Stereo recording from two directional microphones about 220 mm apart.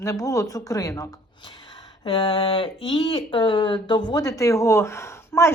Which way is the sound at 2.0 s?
25° left (ahead or behind).